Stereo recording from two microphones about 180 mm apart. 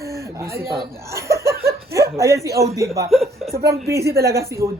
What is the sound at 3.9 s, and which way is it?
Speech, 15° right (ahead or behind).